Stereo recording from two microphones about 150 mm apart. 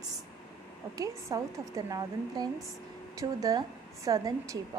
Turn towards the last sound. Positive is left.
turn(degrees=-20)  # may be behind; listen again after turning